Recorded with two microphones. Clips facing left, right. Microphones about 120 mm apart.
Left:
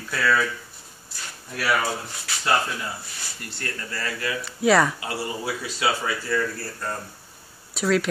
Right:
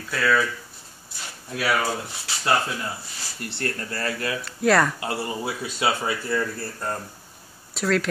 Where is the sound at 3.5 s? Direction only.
30° right (ahead or behind).